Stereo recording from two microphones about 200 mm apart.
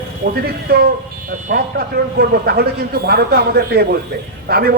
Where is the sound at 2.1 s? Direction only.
50° right (ahead or behind).